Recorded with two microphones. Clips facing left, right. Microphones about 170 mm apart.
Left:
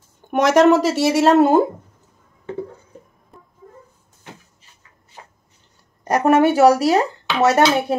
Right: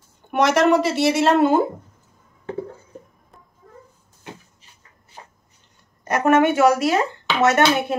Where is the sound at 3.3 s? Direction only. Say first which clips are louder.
Left 5 dB; centre (ahead or behind).